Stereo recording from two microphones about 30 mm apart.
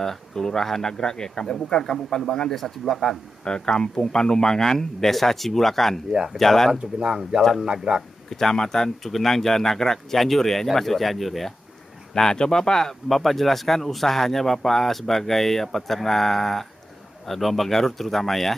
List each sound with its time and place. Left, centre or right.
0.0 s speech: centre; by 1.8 s left
1.8 s speech: centre
2.2 s a man's voice: left
2.5 s speech: centre
3.4 s speech: left; by 6.7 s centre
6.8 s speech: right
8.3 s speech: centre
12.1 s speech: left
13.1 s speech: centre